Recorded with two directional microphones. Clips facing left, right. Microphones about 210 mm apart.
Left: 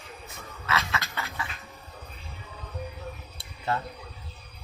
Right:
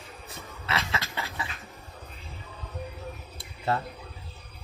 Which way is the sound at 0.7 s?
25° right (ahead or behind).